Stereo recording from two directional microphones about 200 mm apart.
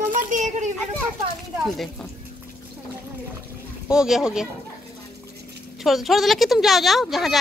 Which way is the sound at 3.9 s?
5° right (ahead or behind).